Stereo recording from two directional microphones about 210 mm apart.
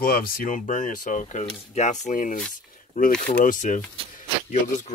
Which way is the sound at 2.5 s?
40° left (ahead or behind).